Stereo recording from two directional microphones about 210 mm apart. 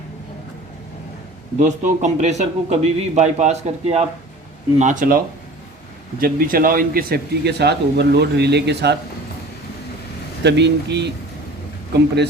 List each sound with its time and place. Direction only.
1.5 s a man's voice: 35° right (ahead or behind); by 9.0 s 55° right (ahead or behind)
10.4 s speech: 55° right (ahead or behind)